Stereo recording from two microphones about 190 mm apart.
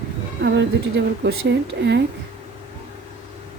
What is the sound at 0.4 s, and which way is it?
A woman's voice, 60° right (ahead or behind).